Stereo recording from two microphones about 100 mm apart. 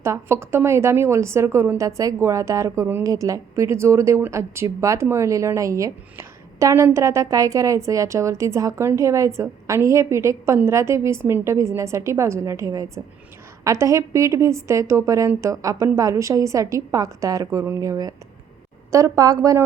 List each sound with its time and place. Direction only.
0.0 s a woman's voice: 25° right (ahead or behind)